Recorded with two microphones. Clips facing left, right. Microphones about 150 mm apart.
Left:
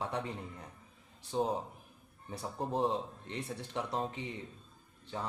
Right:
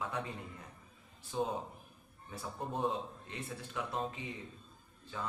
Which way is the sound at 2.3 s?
35° left (ahead or behind).